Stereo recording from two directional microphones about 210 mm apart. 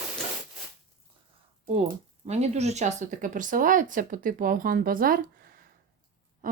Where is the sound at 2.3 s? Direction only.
30° right (ahead or behind).